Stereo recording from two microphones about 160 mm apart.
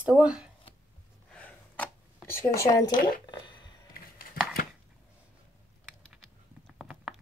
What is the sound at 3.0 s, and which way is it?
Speech, 70° left (ahead or behind).